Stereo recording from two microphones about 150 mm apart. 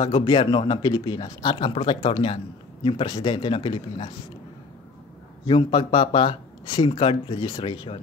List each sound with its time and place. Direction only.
0.0 s speech: 35° left (ahead or behind)
5.5 s speech: 35° left (ahead or behind)